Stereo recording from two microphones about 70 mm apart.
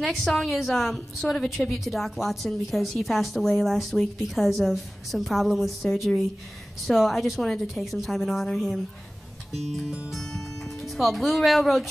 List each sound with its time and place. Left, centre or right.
0.2 s a woman's voice: centre